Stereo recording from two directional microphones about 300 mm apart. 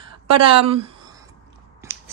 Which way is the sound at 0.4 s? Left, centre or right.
Centre.